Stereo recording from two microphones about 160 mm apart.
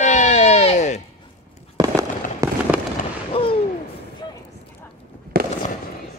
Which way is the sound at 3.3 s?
35° left (ahead or behind).